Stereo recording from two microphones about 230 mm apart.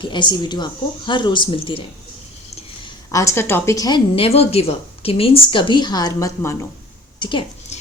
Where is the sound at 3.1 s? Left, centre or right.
Centre.